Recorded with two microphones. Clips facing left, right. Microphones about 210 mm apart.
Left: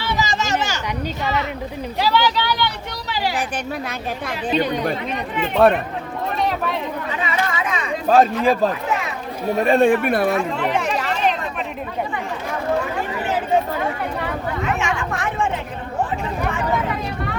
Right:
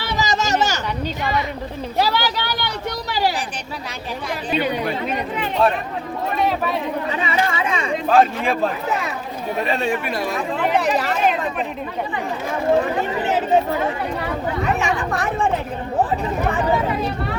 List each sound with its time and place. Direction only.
0.0 s a sound: 40° right (ahead or behind)
2.0 s speech: 40° right (ahead or behind)
5.6 s speech: 55° left (ahead or behind)
7.2 s chatter: 30° right (ahead or behind)
8.1 s speech: 40° left (ahead or behind)
9.6 s speech: 50° left (ahead or behind)
10.5 s chatter: 35° right (ahead or behind)
14.6 s speech: 35° right (ahead or behind)